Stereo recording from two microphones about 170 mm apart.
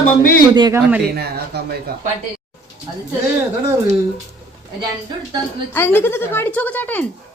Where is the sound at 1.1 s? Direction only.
70° right (ahead or behind).